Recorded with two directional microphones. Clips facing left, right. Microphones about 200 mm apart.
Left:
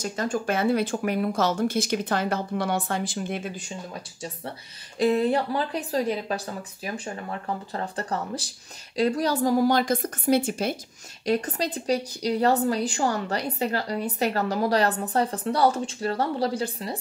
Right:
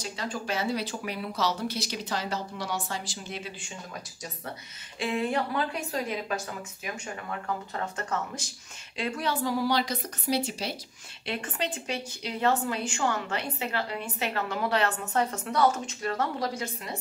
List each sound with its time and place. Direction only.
0.0 s speech: 45° left (ahead or behind)
4.9 s speech: 40° left (ahead or behind)
11.2 s speech: 40° left (ahead or behind)